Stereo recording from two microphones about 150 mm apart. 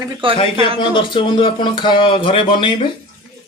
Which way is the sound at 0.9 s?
35° left (ahead or behind).